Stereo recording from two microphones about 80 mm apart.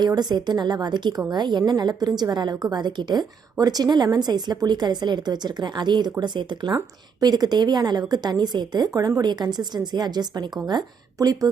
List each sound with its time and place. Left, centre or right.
0.0 s a woman's voice: right
7.2 s a woman's voice: right